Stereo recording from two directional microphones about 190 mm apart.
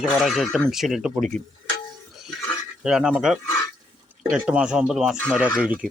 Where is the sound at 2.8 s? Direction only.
5° right (ahead or behind).